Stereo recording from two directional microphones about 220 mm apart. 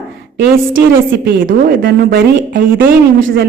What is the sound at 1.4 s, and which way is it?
Speech, 45° right (ahead or behind).